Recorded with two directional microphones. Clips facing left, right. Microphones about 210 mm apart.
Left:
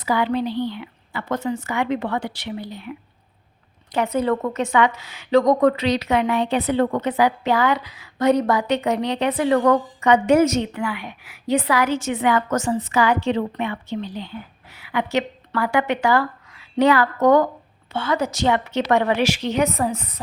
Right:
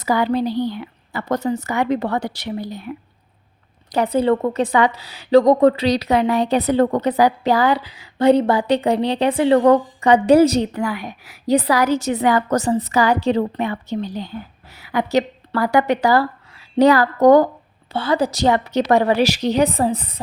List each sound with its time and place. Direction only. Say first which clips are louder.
0.0 s a woman's voice: right 3 dB; 40° right (ahead or behind)